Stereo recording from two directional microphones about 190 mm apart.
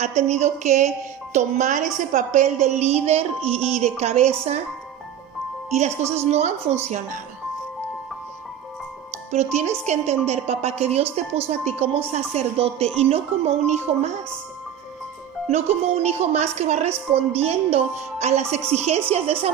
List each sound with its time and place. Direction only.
0.0 s speech: 35° right (ahead or behind)
5.7 s speech: 35° right (ahead or behind)
9.3 s speech: 35° right (ahead or behind)
15.4 s speech: 35° right (ahead or behind)